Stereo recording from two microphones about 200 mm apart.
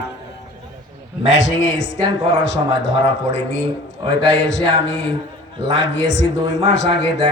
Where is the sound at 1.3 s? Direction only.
65° left (ahead or behind).